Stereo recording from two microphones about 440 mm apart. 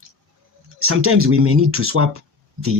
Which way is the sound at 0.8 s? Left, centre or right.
Right.